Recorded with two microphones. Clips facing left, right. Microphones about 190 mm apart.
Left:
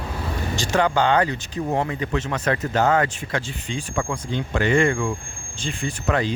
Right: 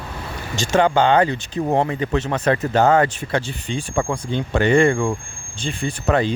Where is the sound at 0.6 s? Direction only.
25° right (ahead or behind).